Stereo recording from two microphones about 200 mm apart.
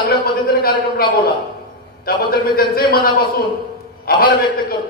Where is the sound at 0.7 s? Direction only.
25° left (ahead or behind).